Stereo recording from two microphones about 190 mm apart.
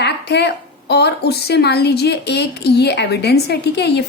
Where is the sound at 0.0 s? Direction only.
60° left (ahead or behind).